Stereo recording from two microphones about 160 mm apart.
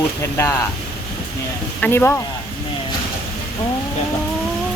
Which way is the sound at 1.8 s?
15° left (ahead or behind).